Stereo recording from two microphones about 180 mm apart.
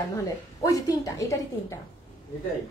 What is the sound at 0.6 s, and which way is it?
A woman's voice, 20° left (ahead or behind).